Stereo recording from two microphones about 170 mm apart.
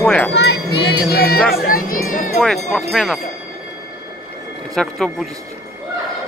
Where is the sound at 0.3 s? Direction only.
85° left.